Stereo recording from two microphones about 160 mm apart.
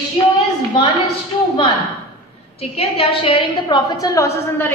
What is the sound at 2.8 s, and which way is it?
A woman's voice, 35° left (ahead or behind).